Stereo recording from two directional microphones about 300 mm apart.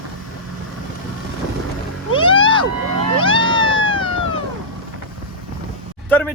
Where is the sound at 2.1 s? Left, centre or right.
Centre.